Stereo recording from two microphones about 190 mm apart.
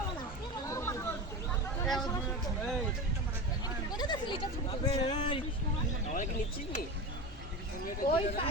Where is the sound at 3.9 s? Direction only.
20° left (ahead or behind).